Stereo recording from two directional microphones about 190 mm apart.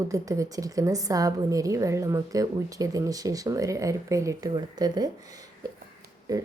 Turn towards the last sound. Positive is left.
turn(degrees=-20)  # may be behind; listen again after turning